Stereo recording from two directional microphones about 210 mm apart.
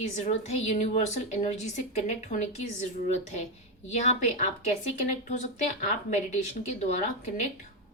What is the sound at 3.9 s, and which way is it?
Speech, 35° left (ahead or behind).